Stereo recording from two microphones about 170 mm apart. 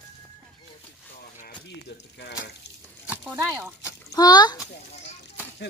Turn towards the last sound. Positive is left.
turn(degrees=25)  # may be behind; listen again after turning